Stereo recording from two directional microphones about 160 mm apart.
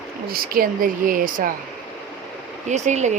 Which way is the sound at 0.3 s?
65° right (ahead or behind).